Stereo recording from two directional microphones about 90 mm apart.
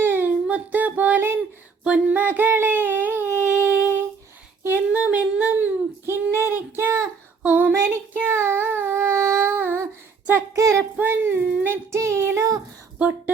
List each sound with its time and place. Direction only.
0.0 s child singing: 25° right (ahead or behind)
0.4 s a sound: 15° right (ahead or behind)
4.7 s humming: 15° right (ahead or behind)
6.1 s child singing: 25° right (ahead or behind)
7.4 s female singing: 20° right (ahead or behind)
7.9 s child singing: 20° right (ahead or behind); by 10.8 s 35° right (ahead or behind)
10.9 s child singing: 25° right (ahead or behind)
13.0 s speech: 15° right (ahead or behind)